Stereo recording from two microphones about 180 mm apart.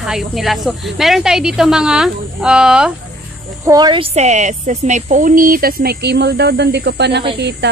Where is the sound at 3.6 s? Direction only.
20° right (ahead or behind).